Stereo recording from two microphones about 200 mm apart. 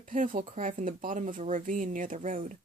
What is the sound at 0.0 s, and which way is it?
Speech, 40° right (ahead or behind).